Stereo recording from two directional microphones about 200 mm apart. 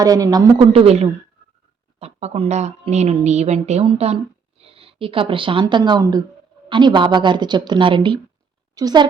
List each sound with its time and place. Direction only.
0.0 s a woman's voice: 20° right (ahead or behind)